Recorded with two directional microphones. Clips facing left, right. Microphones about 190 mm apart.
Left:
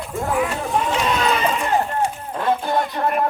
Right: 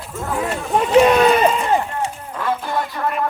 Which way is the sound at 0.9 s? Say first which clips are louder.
Right 9 dB; 60° right (ahead or behind).